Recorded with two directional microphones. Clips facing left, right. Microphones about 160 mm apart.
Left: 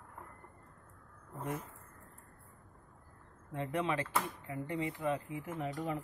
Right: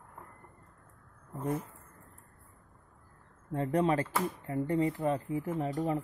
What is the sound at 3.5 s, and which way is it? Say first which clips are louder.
Speech: right 7 dB; 40° right (ahead or behind).